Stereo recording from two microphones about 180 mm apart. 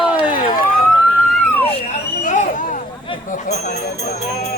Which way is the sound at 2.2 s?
45° left (ahead or behind).